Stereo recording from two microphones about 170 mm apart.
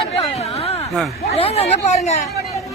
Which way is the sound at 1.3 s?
35° left (ahead or behind).